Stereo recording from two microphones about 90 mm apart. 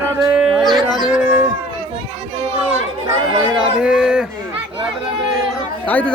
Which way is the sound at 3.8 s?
5° right (ahead or behind).